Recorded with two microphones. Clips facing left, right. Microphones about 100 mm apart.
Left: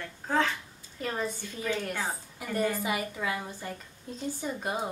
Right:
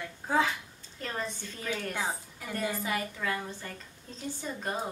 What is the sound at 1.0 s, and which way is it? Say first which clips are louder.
A woman's voice: left 3 dB; 5° left (ahead or behind).